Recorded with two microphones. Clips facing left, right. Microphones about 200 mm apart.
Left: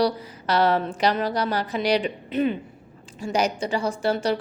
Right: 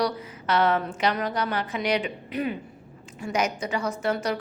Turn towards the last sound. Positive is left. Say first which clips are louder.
# left 3 dB
turn(degrees=30)  # may be behind; listen again after turning